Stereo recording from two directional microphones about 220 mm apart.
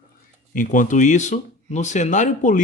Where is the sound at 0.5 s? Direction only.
35° left (ahead or behind).